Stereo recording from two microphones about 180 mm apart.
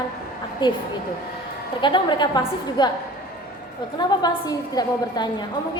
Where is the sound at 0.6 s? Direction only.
25° left (ahead or behind).